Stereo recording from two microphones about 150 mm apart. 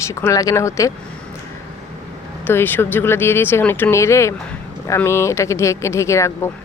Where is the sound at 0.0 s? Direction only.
20° left (ahead or behind).